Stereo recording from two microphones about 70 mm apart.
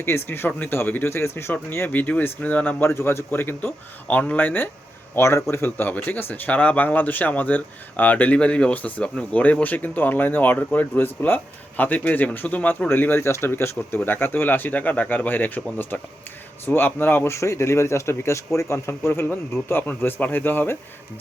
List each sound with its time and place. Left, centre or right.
0.0 s speech: left
2.8 s speech: left
5.1 s speech: left
5.7 s speech: left
17.3 s speech: left